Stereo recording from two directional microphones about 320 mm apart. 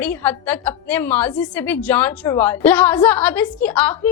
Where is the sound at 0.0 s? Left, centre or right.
Centre.